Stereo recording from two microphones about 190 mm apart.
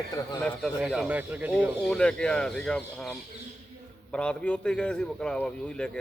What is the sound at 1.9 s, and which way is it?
A man's voice, 5° left (ahead or behind).